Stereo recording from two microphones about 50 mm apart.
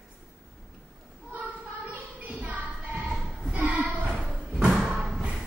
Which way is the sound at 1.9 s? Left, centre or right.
Right.